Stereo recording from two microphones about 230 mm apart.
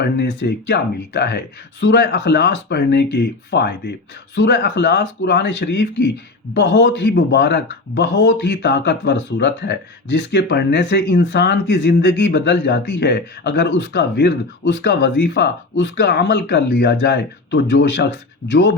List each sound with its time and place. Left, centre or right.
0.0 s speech: left